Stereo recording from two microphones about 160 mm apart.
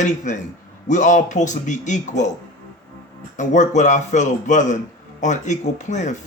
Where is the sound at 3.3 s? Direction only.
50° left (ahead or behind).